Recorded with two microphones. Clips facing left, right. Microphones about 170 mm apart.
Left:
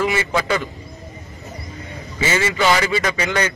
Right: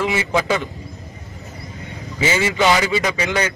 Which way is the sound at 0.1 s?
15° right (ahead or behind).